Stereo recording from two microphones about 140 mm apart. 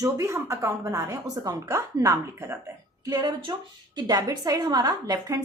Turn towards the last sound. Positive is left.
turn(degrees=-25)  # may be behind; listen again after turning